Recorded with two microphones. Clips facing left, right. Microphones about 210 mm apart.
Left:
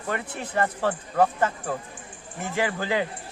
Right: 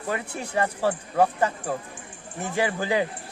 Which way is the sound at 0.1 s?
10° right (ahead or behind).